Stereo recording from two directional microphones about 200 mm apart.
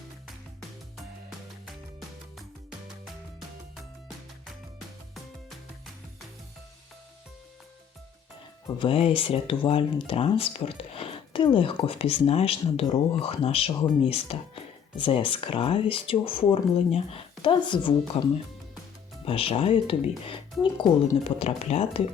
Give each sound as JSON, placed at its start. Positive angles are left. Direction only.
{"t": 8.6, "sound": "speech", "side_deg": 25}